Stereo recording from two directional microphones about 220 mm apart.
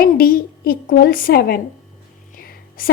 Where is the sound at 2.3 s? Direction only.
40° left (ahead or behind).